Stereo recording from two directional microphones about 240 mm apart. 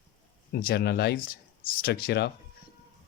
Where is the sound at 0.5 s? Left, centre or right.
Left.